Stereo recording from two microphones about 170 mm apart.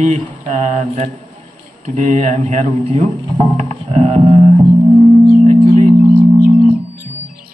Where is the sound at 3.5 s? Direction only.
45° right (ahead or behind).